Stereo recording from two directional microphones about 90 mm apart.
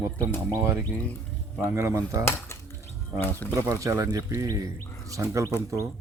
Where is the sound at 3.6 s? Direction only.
35° right (ahead or behind).